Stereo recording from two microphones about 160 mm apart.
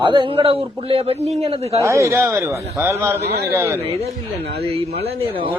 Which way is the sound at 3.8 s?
40° right (ahead or behind).